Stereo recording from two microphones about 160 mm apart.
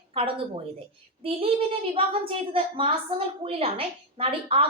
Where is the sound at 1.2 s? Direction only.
35° right (ahead or behind).